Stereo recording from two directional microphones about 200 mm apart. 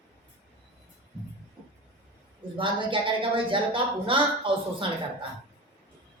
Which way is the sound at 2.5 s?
25° right (ahead or behind).